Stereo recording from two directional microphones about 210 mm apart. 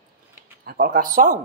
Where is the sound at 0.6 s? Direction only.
45° right (ahead or behind).